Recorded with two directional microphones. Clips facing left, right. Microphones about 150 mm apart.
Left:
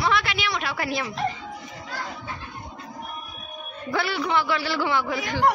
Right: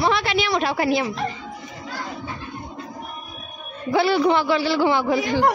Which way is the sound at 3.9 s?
20° right (ahead or behind).